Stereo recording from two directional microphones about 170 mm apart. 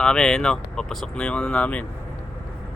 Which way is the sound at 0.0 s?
5° left (ahead or behind).